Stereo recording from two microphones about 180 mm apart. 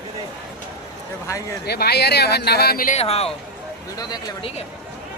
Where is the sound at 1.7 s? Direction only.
65° left (ahead or behind).